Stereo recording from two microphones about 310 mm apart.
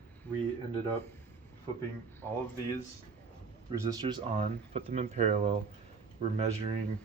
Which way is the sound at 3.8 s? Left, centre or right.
Centre.